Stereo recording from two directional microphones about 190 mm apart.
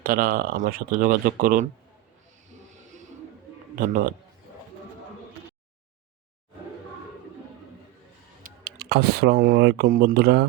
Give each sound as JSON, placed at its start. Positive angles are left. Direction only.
{"t": 0.0, "sound": "speech", "side_deg": -50}
{"t": 3.8, "sound": "speech", "side_deg": -45}
{"t": 8.4, "sound": "speech", "side_deg": -60}